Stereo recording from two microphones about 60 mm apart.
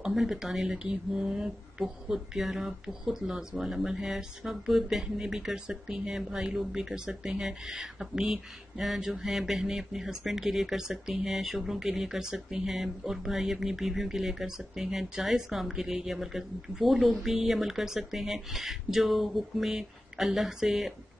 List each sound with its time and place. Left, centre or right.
0.0 s speech: centre